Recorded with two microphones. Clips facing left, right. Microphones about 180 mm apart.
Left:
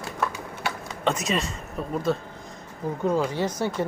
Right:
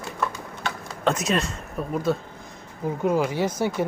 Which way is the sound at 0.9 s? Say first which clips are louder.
Right 3 dB; centre (ahead or behind).